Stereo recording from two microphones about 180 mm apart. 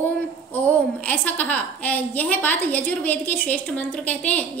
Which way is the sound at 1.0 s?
10° left (ahead or behind).